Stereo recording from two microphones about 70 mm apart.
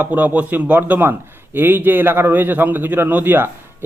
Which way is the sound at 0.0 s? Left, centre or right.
Right.